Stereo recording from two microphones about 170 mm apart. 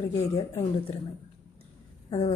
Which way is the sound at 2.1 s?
40° left (ahead or behind).